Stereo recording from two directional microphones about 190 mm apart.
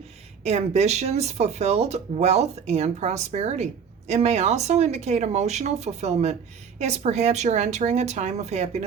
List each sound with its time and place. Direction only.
0.4 s speech: 35° right (ahead or behind)